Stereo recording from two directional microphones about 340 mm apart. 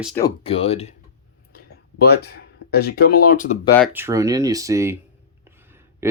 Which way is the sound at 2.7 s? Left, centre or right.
Left.